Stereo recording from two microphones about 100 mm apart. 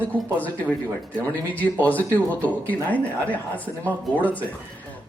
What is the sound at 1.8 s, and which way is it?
Speech, 15° left (ahead or behind).